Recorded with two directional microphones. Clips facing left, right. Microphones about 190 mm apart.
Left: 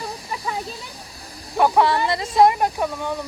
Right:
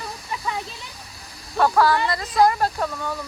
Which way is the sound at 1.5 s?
15° left (ahead or behind).